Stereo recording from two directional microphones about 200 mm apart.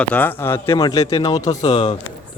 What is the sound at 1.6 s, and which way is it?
Speech, 30° left (ahead or behind).